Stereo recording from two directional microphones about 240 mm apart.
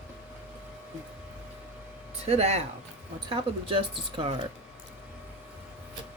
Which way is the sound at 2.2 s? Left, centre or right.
Right.